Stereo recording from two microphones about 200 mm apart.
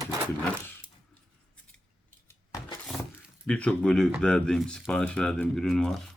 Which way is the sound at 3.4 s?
5° left (ahead or behind).